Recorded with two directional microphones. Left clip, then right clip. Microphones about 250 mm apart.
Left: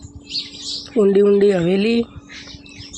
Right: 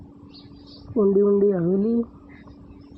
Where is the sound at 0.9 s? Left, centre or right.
Left.